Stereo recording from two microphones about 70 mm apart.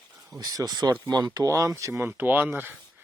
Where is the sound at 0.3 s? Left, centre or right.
Right.